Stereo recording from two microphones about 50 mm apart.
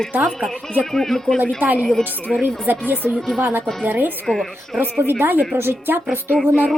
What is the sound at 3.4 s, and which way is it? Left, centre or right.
Speech, right.